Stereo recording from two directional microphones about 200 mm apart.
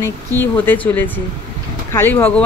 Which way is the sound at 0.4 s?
10° left (ahead or behind).